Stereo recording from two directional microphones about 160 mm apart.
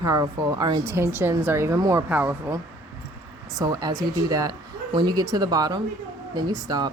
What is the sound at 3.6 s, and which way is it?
Speech, 20° right (ahead or behind).